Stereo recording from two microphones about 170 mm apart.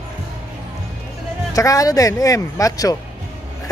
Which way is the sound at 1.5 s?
20° left (ahead or behind).